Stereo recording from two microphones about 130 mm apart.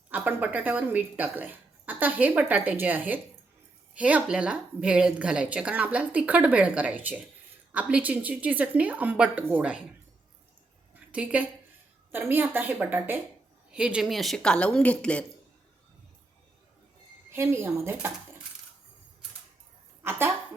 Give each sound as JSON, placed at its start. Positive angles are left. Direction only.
{"t": 0.1, "sound": "a woman's voice", "side_deg": -15}
{"t": 10.9, "sound": "a sound", "side_deg": -10}
{"t": 12.1, "sound": "a woman's voice", "side_deg": -15}
{"t": 17.3, "sound": "speech", "side_deg": -20}
{"t": 20.1, "sound": "a woman's voice", "side_deg": -15}